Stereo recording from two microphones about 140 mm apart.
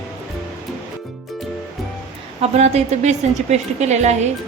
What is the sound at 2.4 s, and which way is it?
A woman's voice, 50° right (ahead or behind).